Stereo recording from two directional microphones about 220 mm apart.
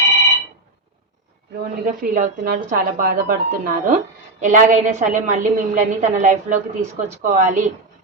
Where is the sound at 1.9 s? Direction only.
35° right (ahead or behind).